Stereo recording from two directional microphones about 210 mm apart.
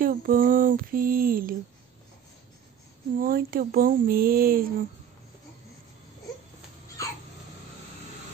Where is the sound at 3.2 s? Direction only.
45° right (ahead or behind).